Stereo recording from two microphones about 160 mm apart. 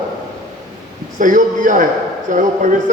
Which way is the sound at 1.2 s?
55° right (ahead or behind).